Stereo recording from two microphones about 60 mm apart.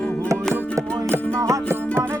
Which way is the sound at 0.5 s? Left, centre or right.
Right.